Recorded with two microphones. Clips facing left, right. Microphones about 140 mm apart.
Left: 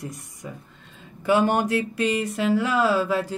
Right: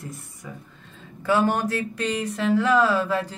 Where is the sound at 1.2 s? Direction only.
20° left (ahead or behind).